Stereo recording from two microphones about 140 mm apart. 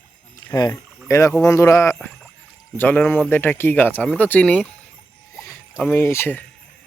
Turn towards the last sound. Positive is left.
turn(degrees=15)  # may be behind; listen again after turning